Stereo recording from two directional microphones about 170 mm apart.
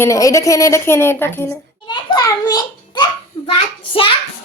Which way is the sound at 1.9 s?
20° left (ahead or behind).